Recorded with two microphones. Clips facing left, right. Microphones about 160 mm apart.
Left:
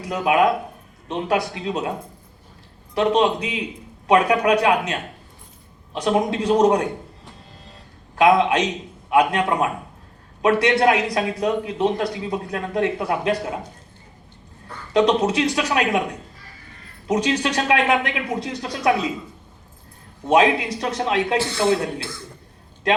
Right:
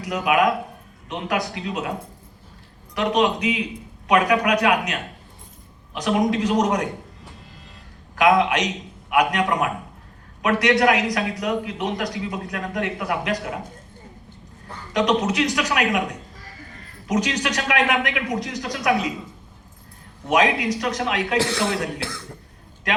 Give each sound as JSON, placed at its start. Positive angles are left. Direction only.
{"t": 0.0, "sound": "a man's voice", "side_deg": 30}
{"t": 2.9, "sound": "a man's voice", "side_deg": 30}
{"t": 8.1, "sound": "a man's voice", "side_deg": 30}
{"t": 14.9, "sound": "a man's voice", "side_deg": 30}
{"t": 17.1, "sound": "a man's voice", "side_deg": 30}
{"t": 20.2, "sound": "a man's voice", "side_deg": 30}
{"t": 21.3, "sound": "speech", "side_deg": -90}